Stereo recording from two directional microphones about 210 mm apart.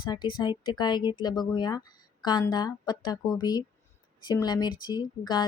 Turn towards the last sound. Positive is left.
turn(degrees=20)  # may be behind; listen again after turning